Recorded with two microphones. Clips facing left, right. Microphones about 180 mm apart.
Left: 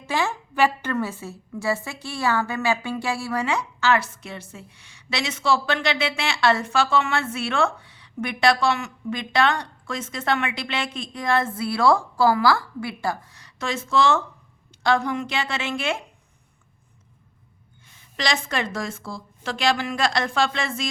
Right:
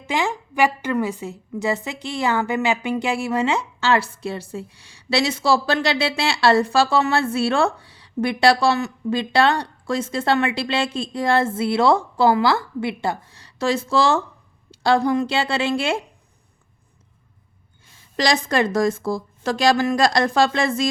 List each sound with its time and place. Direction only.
0.1 s a woman's voice: 15° right (ahead or behind); by 16.0 s 30° right (ahead or behind)
18.2 s a woman's voice: 40° right (ahead or behind)